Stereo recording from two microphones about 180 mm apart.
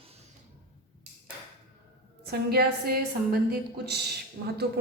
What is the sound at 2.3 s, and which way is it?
A woman's voice, 60° right (ahead or behind).